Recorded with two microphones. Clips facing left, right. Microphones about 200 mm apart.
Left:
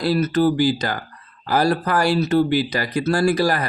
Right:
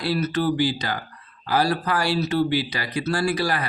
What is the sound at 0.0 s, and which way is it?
Speech, 45° left (ahead or behind).